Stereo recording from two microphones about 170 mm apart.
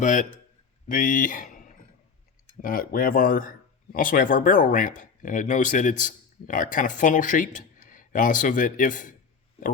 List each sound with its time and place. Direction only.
0.0 s speech: 50° left (ahead or behind)